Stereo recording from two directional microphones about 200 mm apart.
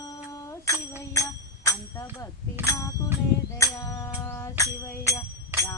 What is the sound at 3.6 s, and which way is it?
Music, 15° left (ahead or behind).